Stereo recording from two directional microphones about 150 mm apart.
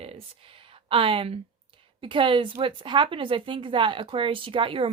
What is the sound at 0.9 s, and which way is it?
Speech, 35° right (ahead or behind).